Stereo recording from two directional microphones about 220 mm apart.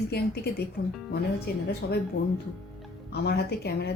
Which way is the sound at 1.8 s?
45° left (ahead or behind).